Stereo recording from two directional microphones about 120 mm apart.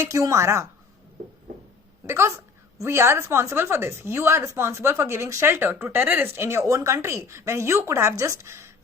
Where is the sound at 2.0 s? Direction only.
25° right (ahead or behind).